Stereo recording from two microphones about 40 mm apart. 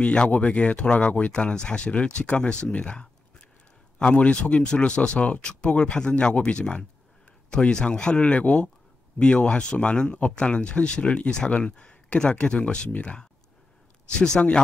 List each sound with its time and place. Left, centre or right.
0.0 s speech: left
1.3 s speech: left